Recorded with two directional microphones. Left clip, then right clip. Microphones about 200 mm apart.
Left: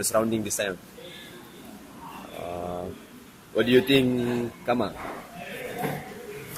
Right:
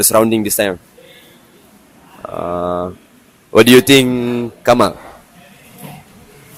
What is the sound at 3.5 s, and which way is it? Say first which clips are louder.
Speech: right 13 dB; 50° right (ahead or behind).